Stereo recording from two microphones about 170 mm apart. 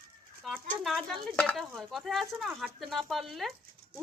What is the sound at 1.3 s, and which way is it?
Speech, 5° left (ahead or behind).